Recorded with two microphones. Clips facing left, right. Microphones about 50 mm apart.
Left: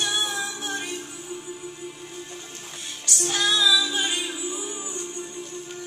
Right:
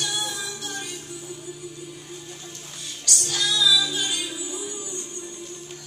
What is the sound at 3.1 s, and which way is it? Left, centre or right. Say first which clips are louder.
Music: left 3 dB; left.